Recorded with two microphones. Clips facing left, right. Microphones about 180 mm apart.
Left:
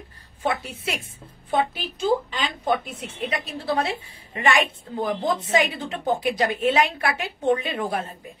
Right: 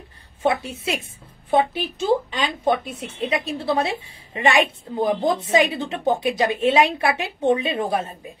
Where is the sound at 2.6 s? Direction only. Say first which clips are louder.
Right 3 dB; 25° right (ahead or behind).